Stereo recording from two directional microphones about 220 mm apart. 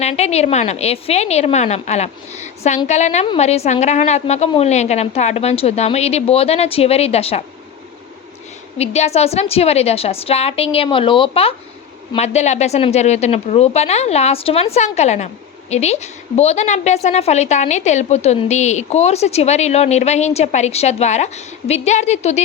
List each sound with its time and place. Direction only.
0.0 s a woman's voice: 30° left (ahead or behind)
8.8 s a woman's voice: 30° left (ahead or behind)